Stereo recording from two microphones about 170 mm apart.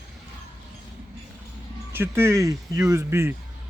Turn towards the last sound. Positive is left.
turn(degrees=-15)  # may be behind; listen again after turning